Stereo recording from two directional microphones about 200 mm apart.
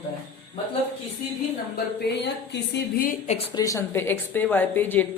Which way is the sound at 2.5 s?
50° left (ahead or behind).